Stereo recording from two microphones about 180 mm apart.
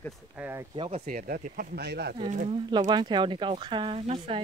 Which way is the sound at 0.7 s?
30° right (ahead or behind).